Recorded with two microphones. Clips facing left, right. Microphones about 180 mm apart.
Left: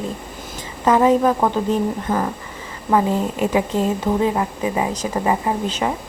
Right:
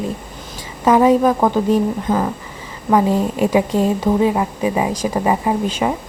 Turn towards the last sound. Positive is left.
turn(degrees=-15)  # may be behind; listen again after turning